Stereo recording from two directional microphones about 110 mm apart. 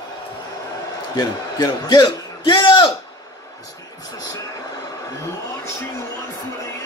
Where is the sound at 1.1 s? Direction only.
40° left (ahead or behind).